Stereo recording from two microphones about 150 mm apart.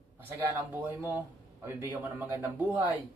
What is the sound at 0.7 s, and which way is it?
Speech, 15° right (ahead or behind).